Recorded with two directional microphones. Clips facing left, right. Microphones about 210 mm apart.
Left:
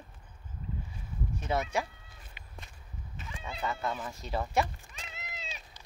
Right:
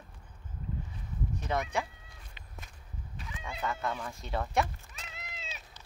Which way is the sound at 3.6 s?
5° left (ahead or behind).